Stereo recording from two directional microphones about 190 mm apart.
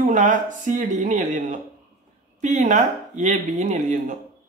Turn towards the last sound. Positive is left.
turn(degrees=-40)  # may be behind; listen again after turning